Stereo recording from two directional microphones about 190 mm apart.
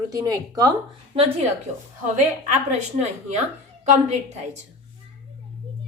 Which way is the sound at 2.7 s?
35° right (ahead or behind).